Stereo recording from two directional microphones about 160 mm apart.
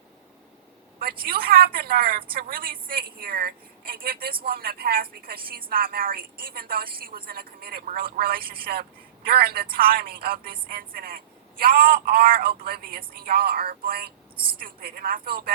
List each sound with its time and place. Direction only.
0.9 s a woman's voice: 70° right (ahead or behind)